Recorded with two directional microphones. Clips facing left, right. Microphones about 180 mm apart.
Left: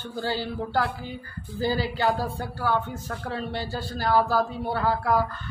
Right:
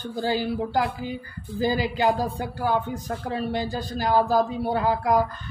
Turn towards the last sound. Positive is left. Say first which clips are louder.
# right 2 dB
turn(degrees=-15)  # may be behind; listen again after turning